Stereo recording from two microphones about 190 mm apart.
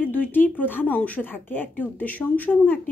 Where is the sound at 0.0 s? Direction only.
10° left (ahead or behind).